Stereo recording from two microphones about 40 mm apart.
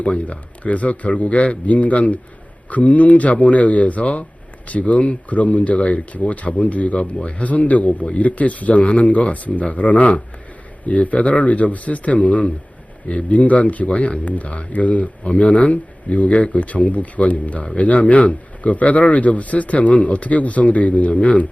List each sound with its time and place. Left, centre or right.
0.0 s speech: left